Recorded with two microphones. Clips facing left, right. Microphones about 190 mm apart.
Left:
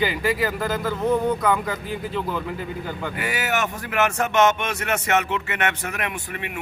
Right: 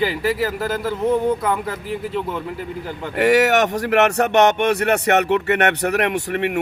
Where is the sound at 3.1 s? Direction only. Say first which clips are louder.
Right 13 dB; 75° right (ahead or behind).